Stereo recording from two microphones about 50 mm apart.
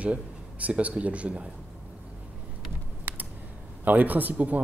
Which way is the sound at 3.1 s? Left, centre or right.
Right.